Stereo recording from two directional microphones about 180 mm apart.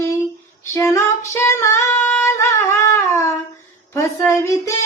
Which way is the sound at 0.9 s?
15° left (ahead or behind).